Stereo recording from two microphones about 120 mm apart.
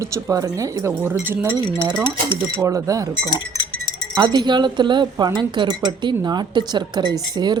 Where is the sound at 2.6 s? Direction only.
25° right (ahead or behind).